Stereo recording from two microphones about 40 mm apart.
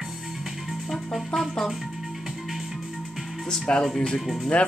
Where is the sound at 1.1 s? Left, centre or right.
Centre.